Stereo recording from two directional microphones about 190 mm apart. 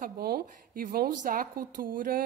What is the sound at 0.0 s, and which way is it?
A woman's voice, 50° right (ahead or behind).